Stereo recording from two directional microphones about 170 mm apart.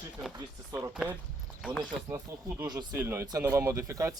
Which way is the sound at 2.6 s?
25° right (ahead or behind).